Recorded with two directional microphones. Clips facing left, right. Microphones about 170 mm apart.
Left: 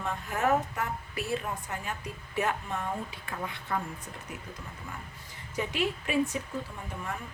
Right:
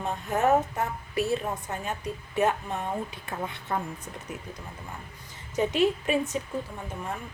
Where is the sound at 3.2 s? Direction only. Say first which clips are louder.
Right 3 dB; 20° right (ahead or behind).